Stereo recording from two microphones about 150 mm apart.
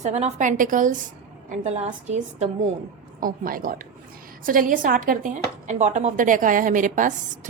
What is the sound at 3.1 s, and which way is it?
A woman's voice, 65° right (ahead or behind).